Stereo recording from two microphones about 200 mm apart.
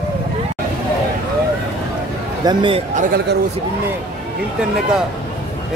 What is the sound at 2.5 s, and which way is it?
Speech, 25° right (ahead or behind).